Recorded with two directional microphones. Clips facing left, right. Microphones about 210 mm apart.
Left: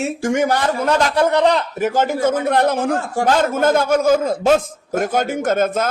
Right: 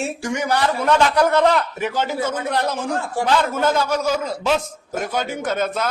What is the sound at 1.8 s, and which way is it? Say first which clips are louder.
A man's voice: left 5 dB; 45° left (ahead or behind).